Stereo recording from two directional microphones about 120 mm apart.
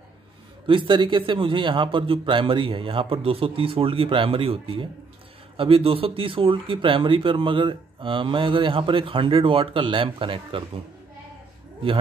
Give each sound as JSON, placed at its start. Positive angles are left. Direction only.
{"t": 0.7, "sound": "speech", "side_deg": -45}